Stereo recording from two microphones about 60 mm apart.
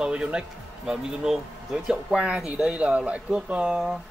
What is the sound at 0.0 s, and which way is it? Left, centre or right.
Speech, centre.